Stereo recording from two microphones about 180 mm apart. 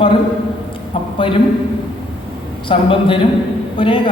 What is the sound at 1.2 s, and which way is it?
Speech, 30° left (ahead or behind).